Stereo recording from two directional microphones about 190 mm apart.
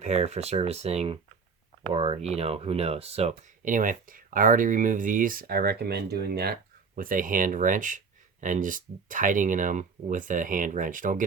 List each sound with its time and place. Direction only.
0.0 s speech: 35° right (ahead or behind)